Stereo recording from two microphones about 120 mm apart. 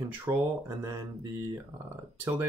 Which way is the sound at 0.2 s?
20° right (ahead or behind).